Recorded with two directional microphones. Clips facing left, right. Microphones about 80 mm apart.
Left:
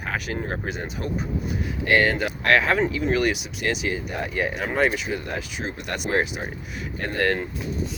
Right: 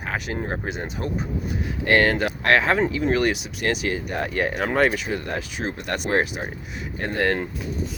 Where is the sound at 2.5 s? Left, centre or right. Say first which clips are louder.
Even; right.